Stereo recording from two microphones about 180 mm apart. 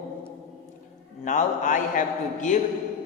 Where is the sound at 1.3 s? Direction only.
45° left (ahead or behind).